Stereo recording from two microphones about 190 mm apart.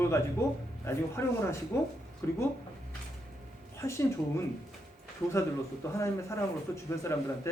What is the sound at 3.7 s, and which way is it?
Speech, 15° left (ahead or behind).